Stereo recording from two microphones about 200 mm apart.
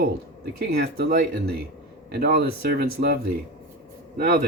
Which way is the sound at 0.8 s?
50° right (ahead or behind).